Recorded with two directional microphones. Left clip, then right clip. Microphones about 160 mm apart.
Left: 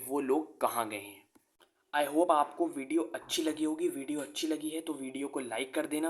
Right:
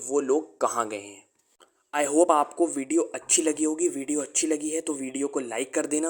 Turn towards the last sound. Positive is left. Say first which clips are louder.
# right 6 dB
turn(degrees=-45)  # may be behind; listen again after turning